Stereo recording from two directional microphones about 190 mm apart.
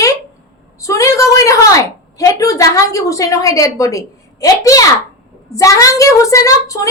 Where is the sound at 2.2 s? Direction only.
15° left (ahead or behind).